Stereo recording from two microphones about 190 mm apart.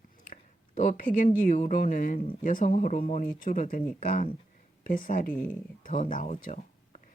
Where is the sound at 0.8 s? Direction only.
45° left (ahead or behind).